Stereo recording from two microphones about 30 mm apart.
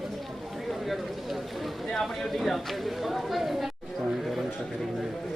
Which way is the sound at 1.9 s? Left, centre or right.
Centre.